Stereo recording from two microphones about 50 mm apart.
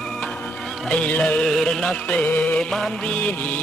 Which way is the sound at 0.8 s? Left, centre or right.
Left.